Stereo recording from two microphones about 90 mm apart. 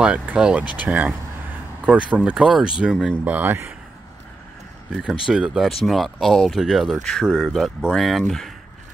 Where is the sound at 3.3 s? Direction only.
20° right (ahead or behind).